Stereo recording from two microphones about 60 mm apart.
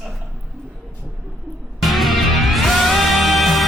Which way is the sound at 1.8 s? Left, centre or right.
Centre.